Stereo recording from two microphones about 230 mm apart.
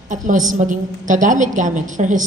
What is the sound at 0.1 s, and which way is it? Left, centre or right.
A woman's voice, right.